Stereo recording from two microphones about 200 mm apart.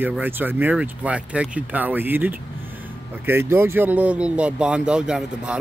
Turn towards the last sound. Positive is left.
turn(degrees=-5)  # may be behind; listen again after turning